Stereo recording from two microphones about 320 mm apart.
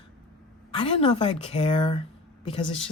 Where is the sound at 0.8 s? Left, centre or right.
Centre.